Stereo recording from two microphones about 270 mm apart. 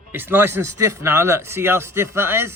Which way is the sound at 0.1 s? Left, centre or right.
Centre.